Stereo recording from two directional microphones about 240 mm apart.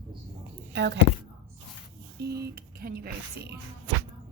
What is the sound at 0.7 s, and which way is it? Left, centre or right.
Speech, right.